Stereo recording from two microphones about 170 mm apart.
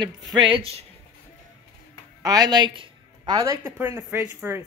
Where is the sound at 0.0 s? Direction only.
30° right (ahead or behind).